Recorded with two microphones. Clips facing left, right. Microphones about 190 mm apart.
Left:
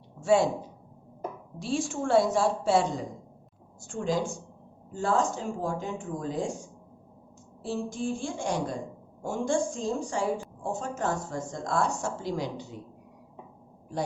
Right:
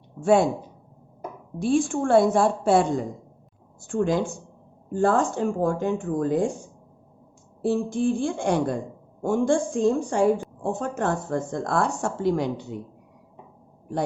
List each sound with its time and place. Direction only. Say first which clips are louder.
0.2 s speech: right 4 dB; 55° right (ahead or behind)
1.5 s a woman's voice: right 9 dB; 55° right (ahead or behind)
7.6 s a woman's voice: right 8 dB; 60° right (ahead or behind)